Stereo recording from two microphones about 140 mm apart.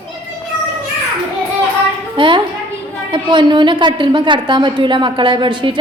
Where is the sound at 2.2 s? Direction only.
35° right (ahead or behind).